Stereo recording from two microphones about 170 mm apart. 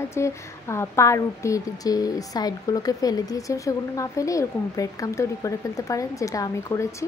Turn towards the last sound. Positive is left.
turn(degrees=20)  # may be behind; listen again after turning